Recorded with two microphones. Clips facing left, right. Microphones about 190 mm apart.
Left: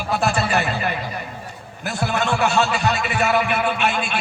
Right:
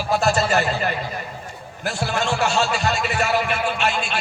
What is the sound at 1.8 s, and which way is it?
Speech, 55° left (ahead or behind).